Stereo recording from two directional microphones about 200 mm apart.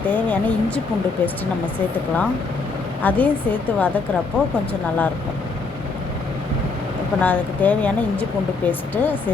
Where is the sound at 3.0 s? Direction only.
10° left (ahead or behind).